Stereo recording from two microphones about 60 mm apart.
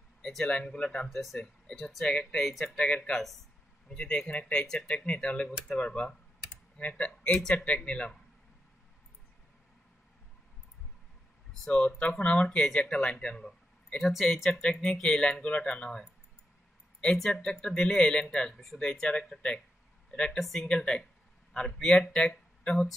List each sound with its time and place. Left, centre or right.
0.2 s speech: centre
1.1 s speech: centre
11.9 s speech: centre
20.6 s speech: centre